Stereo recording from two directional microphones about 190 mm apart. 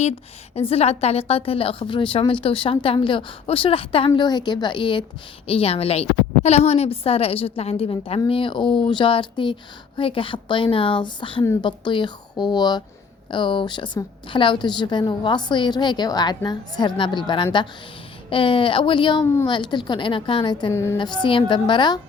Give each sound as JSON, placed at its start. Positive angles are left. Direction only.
{"t": 0.5, "sound": "a woman's voice", "side_deg": 30}